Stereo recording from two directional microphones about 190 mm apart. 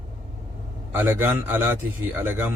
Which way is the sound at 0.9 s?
10° right (ahead or behind).